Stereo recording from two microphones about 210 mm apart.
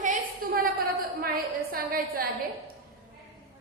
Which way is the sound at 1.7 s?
45° right (ahead or behind).